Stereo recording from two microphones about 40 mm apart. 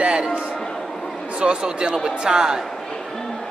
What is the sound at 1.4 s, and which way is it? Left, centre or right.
A man's voice, right.